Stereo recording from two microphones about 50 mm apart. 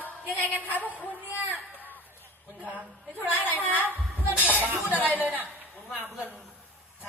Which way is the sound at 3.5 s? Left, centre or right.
Left.